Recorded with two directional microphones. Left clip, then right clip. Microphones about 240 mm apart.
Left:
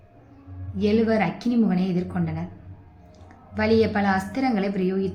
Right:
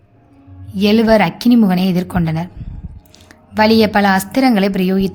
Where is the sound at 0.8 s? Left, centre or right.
Right.